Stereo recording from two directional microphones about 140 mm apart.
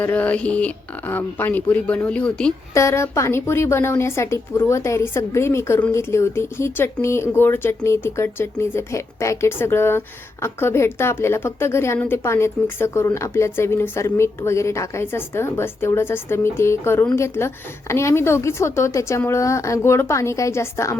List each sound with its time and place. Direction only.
0.0 s a woman's voice: 10° left (ahead or behind)
2.7 s a woman's voice: 20° left (ahead or behind)